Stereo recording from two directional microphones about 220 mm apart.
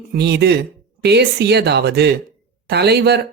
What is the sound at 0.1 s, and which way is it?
Speech, 50° right (ahead or behind).